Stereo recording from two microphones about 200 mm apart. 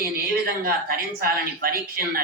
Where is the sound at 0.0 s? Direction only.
50° right (ahead or behind).